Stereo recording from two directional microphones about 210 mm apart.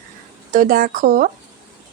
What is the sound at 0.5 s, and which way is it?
Speech, 40° right (ahead or behind).